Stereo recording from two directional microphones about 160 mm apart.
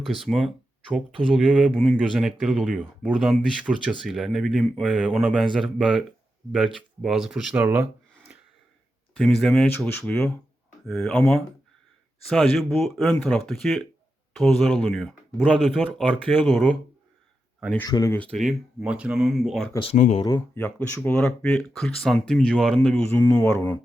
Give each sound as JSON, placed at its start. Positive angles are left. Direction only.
{"t": 0.0, "sound": "speech", "side_deg": 0}
{"t": 9.1, "sound": "speech", "side_deg": 0}
{"t": 9.6, "sound": "speech", "side_deg": 15}
{"t": 12.3, "sound": "speech", "side_deg": 0}
{"t": 17.8, "sound": "speech", "side_deg": 25}
{"t": 18.2, "sound": "speech", "side_deg": 5}
{"t": 19.8, "sound": "speech", "side_deg": 40}
{"t": 20.6, "sound": "speech", "side_deg": 10}